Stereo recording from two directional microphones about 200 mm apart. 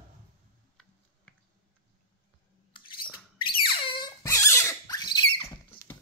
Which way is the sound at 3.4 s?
25° left (ahead or behind).